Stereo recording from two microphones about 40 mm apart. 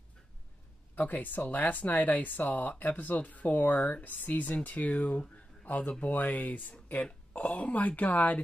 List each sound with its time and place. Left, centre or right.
0.9 s speech: left